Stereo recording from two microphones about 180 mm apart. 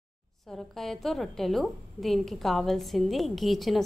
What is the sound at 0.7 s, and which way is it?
A woman's voice, centre (ahead or behind).